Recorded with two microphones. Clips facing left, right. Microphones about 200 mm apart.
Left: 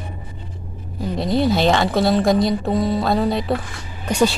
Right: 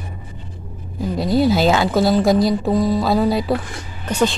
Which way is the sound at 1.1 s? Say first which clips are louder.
Right 2 dB; centre (ahead or behind).